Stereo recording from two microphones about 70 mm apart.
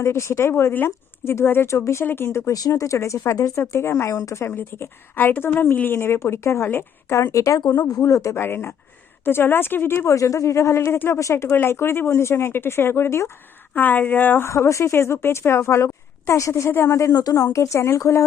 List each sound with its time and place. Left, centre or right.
0.0 s a woman's voice: left
2.5 s speech: left
3.6 s a woman's voice: left
7.8 s speech: left
8.0 s speech: left
8.4 s a woman's voice: left
10.2 s speech: left
11.2 s speech: left
11.5 s a woman's voice: left
13.7 s speech: left
14.5 s a woman's voice: left